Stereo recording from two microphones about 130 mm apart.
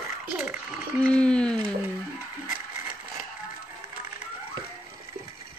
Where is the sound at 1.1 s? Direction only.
10° left (ahead or behind).